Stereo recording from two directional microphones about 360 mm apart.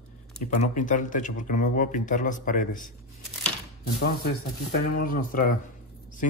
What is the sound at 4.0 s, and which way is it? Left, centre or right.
Speech, left.